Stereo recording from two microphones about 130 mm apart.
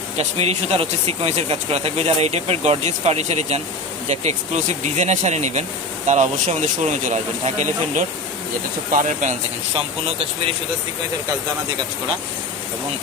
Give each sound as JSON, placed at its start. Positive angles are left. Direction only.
{"t": 0.2, "sound": "speech", "side_deg": -55}